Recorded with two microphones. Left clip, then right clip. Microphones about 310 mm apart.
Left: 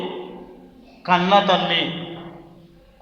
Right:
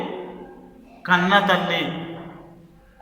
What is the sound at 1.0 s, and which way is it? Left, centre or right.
Speech, centre.